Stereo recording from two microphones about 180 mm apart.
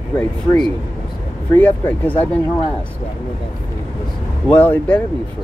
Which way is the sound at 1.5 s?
10° left (ahead or behind).